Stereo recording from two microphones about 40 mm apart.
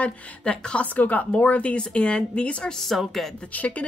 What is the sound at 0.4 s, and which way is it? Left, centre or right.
Speech, left.